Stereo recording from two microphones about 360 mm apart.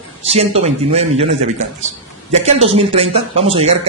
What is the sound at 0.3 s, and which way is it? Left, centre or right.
Speech, centre.